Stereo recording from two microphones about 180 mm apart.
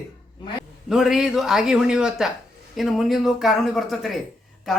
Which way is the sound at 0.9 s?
Centre (ahead or behind).